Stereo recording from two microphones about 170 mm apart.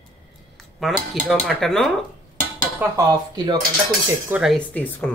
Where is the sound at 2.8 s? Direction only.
20° right (ahead or behind).